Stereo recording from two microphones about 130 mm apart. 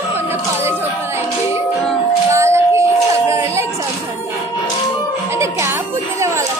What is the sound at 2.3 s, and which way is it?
Music, 20° right (ahead or behind).